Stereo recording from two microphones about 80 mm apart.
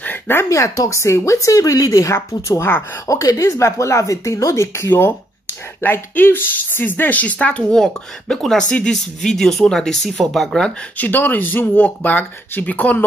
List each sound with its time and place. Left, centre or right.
0.0 s a sound: left
0.5 s speech: left; by 10.7 s centre
11.0 s speech: left